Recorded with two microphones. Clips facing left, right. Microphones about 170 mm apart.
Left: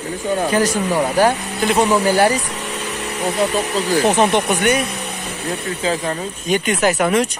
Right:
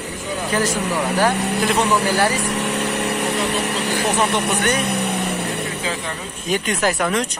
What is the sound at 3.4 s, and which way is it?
Speech, 70° right (ahead or behind).